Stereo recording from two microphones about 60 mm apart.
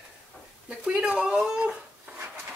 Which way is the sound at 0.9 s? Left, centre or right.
Centre.